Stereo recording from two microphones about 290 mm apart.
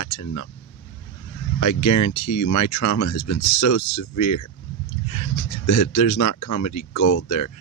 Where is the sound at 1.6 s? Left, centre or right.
Left.